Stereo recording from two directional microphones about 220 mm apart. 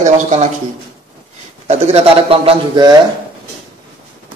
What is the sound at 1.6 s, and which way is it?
A man's voice, 30° right (ahead or behind).